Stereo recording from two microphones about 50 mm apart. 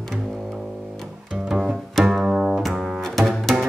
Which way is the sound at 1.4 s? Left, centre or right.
Centre.